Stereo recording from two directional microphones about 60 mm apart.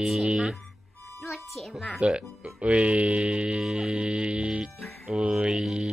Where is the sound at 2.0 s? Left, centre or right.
Centre.